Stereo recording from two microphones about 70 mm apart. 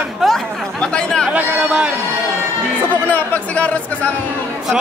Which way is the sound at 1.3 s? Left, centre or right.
Centre.